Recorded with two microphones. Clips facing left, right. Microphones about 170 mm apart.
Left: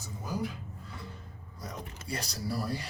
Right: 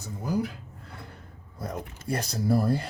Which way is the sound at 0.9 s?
60° right (ahead or behind).